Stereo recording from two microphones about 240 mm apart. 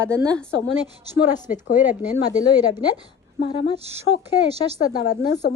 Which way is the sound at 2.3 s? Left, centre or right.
Centre.